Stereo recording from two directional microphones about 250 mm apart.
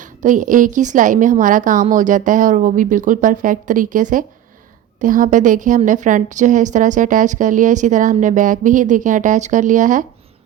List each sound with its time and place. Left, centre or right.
0.0 s a woman's voice: right